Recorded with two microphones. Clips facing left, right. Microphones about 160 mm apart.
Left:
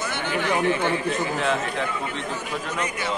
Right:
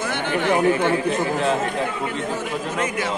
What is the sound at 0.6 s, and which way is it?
A man's voice, 40° right (ahead or behind).